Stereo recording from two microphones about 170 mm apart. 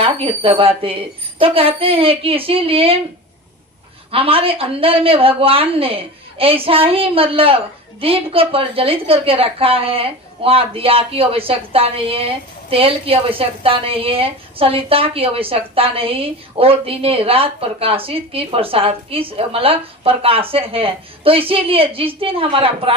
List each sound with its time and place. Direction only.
0.0 s a woman's voice: 35° right (ahead or behind)
4.1 s a woman's voice: 35° right (ahead or behind)